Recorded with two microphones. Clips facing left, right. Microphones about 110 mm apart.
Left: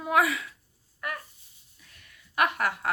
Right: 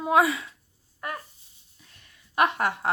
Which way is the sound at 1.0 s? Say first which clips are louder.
Right 1 dB; 30° right (ahead or behind).